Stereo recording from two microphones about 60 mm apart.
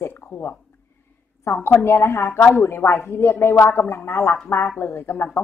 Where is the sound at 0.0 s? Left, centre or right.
Left.